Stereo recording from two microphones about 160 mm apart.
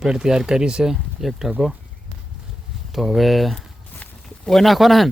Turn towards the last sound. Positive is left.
turn(degrees=0)  # may be behind; listen again after turning